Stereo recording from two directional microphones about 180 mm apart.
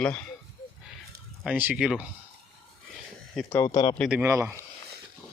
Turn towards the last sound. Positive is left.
turn(degrees=-15)  # may be behind; listen again after turning